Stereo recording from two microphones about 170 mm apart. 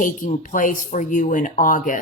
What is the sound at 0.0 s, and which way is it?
A woman's voice, 50° left (ahead or behind).